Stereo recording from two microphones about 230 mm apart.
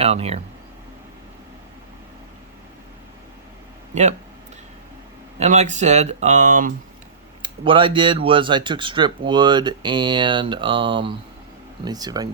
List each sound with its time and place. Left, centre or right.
0.0 s speech: right
5.4 s speech: right
7.4 s speech: right